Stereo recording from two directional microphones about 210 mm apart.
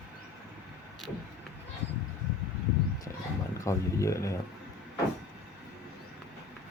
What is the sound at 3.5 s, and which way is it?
Speech, 15° left (ahead or behind).